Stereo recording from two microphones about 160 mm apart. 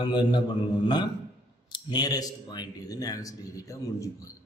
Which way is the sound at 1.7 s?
25° left (ahead or behind).